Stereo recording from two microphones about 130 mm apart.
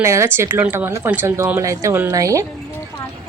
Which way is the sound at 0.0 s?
20° right (ahead or behind).